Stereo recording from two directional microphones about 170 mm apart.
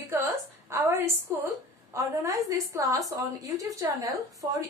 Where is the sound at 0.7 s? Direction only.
15° right (ahead or behind).